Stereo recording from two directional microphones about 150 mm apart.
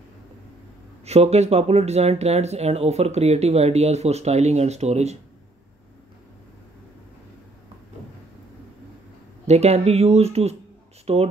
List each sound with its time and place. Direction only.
1.0 s speech: 45° right (ahead or behind)
9.5 s speech: 45° right (ahead or behind)